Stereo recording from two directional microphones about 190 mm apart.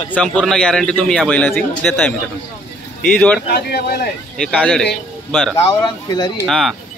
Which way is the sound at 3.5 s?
55° left (ahead or behind).